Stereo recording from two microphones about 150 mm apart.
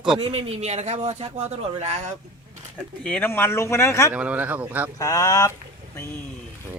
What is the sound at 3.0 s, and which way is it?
Speech, 10° left (ahead or behind).